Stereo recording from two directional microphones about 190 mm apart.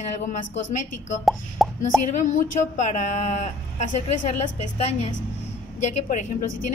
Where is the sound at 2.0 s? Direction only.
40° left (ahead or behind).